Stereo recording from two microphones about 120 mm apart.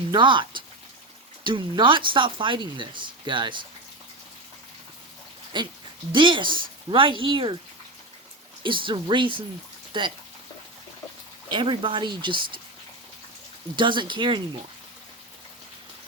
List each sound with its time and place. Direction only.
0.1 s speech: 40° right (ahead or behind)
5.5 s speech: 40° right (ahead or behind)
8.6 s speech: 45° right (ahead or behind)
11.5 s speech: 45° right (ahead or behind)
13.7 s speech: 40° right (ahead or behind)